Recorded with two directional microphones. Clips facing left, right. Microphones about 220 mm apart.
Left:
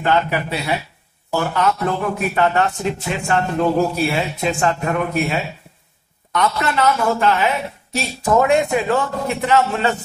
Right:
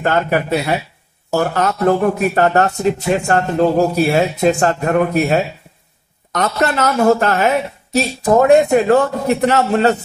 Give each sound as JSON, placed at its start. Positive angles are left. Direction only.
{"t": 0.0, "sound": "a man's voice", "side_deg": -45}